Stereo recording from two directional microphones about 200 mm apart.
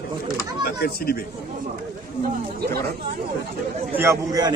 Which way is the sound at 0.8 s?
50° left (ahead or behind).